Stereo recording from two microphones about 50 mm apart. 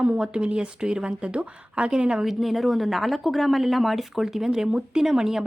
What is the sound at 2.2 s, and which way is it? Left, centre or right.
Speech, centre.